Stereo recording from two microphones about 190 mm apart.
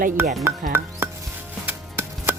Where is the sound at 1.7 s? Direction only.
10° right (ahead or behind).